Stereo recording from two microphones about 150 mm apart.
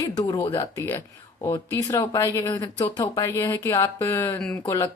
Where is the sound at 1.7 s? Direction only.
20° left (ahead or behind).